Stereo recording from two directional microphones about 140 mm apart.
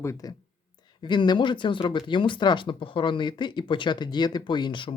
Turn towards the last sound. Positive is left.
turn(degrees=35)  # may be behind; listen again after turning